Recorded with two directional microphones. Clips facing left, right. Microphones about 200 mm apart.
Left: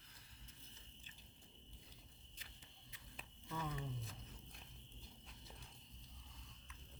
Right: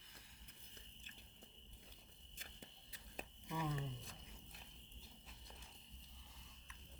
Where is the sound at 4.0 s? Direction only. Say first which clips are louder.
Left 3 dB; centre (ahead or behind).